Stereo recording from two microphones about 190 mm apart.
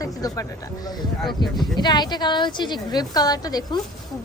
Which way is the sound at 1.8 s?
20° left (ahead or behind).